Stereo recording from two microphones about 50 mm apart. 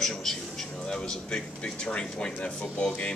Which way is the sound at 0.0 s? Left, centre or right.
Centre.